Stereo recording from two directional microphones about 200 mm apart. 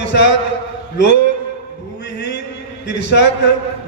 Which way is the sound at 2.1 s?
60° left (ahead or behind).